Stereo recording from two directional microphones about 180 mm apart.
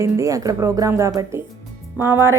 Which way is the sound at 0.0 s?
20° right (ahead or behind).